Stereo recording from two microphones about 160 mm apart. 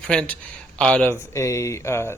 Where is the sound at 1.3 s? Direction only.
20° left (ahead or behind).